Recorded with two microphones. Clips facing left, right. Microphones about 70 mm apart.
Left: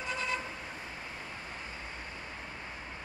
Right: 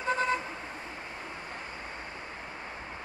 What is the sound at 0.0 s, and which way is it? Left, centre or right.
Vehicle, right.